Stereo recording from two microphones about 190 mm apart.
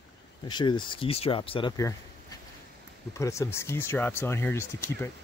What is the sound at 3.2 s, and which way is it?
Speech, 15° left (ahead or behind).